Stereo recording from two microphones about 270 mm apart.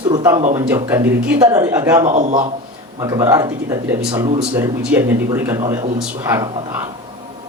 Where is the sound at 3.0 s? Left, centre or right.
Centre.